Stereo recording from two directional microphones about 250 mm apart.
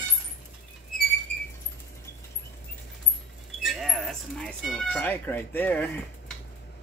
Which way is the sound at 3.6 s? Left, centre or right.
Centre.